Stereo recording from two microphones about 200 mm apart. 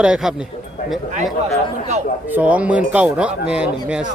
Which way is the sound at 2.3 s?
5° right (ahead or behind).